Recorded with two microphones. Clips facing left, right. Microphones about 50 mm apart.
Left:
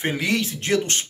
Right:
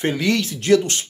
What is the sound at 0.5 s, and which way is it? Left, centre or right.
Speech, left.